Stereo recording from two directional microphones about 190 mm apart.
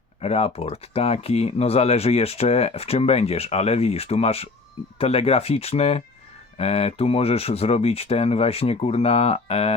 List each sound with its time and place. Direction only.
0.2 s speech: 30° left (ahead or behind)